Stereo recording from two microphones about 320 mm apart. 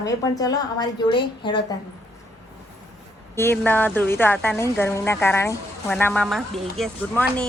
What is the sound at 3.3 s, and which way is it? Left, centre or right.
A woman's voice, centre.